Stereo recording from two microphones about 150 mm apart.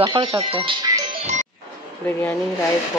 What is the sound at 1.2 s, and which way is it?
Music, 55° right (ahead or behind).